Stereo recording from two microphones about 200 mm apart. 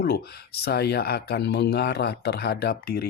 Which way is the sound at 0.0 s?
50° left (ahead or behind).